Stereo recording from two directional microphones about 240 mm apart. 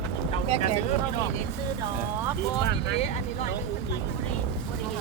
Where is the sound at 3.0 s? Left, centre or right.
Left.